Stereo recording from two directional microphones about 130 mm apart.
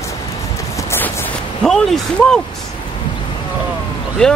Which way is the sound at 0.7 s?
20° left (ahead or behind).